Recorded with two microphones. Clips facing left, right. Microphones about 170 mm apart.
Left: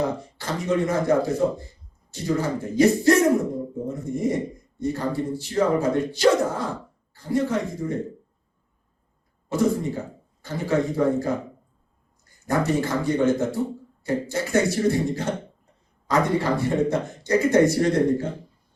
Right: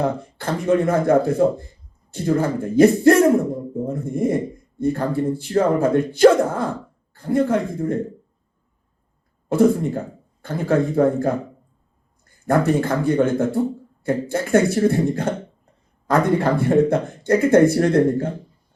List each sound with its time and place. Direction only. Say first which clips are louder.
0.0 s a man's voice: right 4 dB; 55° right (ahead or behind)
9.5 s a man's voice: right 6 dB; 55° right (ahead or behind)